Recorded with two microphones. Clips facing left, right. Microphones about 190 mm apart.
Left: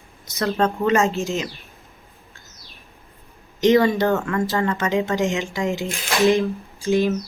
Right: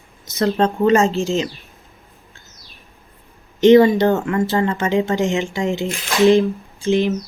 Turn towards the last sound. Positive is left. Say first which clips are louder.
# right 2 dB
turn(degrees=-15)  # may be behind; listen again after turning